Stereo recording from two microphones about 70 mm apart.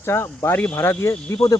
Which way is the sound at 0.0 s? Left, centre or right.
Left.